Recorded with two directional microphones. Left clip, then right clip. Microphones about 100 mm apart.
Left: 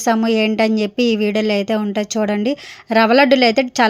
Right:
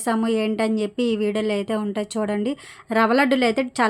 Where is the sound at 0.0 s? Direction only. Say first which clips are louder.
Left 6 dB; 40° left (ahead or behind).